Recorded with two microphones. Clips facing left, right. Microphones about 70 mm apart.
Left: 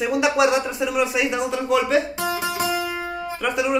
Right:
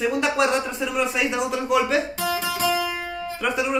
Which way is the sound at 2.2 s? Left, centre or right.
Centre.